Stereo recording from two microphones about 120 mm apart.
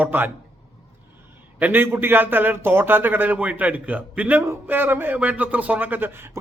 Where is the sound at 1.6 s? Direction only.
15° right (ahead or behind).